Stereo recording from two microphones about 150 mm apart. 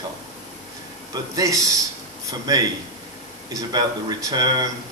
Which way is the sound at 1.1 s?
25° right (ahead or behind).